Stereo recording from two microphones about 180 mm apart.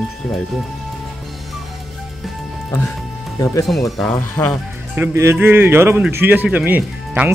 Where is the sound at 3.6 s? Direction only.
Centre (ahead or behind).